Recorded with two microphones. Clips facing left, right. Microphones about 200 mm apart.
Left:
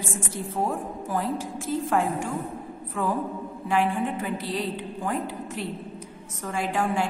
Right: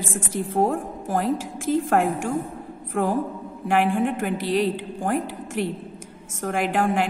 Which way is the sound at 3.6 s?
85° right.